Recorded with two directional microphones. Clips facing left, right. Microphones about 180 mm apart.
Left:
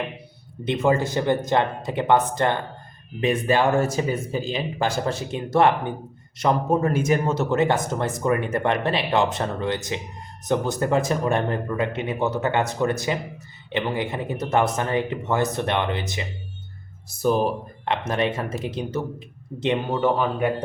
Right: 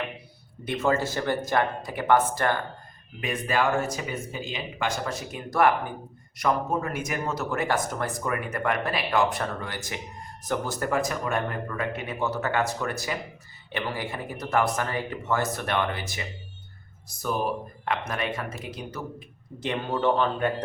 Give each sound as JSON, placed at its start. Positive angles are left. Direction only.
{"t": 0.6, "sound": "a man's voice", "side_deg": 20}
{"t": 19.9, "sound": "speech", "side_deg": 10}